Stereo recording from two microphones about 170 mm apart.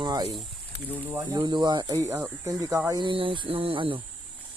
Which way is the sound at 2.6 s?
20° right (ahead or behind).